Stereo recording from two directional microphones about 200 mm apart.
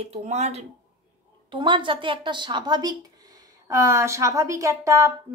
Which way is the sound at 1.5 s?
25° right (ahead or behind).